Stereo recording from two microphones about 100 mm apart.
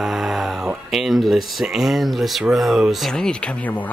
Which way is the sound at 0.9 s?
Centre (ahead or behind).